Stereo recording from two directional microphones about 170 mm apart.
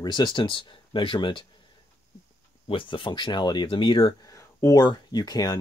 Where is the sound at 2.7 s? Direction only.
30° left (ahead or behind).